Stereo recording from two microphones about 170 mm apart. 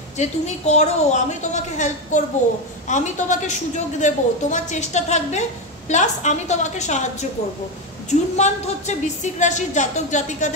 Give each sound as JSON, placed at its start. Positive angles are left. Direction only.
{"t": 0.2, "sound": "a woman's voice", "side_deg": 40}